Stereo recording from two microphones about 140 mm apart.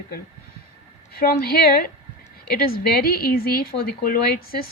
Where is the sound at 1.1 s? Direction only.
90° left.